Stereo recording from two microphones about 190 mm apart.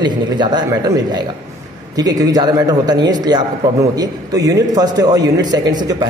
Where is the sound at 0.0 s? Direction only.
20° right (ahead or behind).